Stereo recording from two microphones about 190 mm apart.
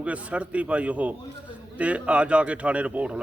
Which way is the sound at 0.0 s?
5° right (ahead or behind).